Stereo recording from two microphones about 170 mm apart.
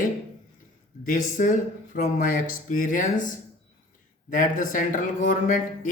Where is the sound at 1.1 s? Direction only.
50° left (ahead or behind).